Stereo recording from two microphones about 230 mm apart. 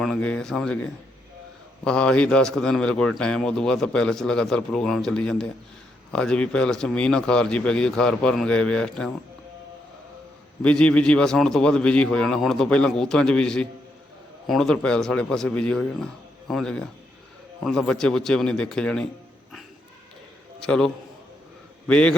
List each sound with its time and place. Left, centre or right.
0.0 s a man's voice: centre
1.8 s a man's voice: centre
10.6 s a man's voice: centre
20.7 s a man's voice: centre